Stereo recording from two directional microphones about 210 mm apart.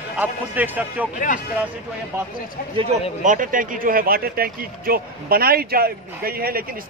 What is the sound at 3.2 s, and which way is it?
Speech, 40° right (ahead or behind).